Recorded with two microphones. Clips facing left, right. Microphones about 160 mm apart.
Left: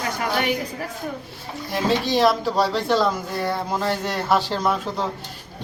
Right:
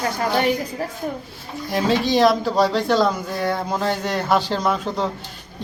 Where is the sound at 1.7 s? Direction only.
Centre (ahead or behind).